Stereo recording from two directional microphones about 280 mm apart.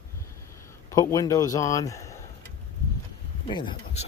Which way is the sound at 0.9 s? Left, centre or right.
Centre.